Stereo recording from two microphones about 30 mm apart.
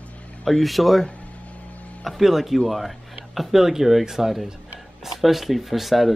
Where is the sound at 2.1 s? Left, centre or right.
Centre.